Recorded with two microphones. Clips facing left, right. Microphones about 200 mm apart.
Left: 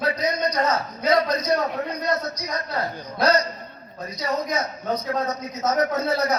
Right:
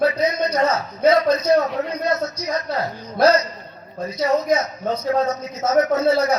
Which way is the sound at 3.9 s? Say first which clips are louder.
Right 7 dB; 25° right (ahead or behind).